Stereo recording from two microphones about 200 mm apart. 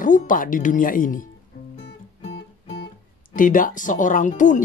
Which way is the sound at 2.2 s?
60° left (ahead or behind).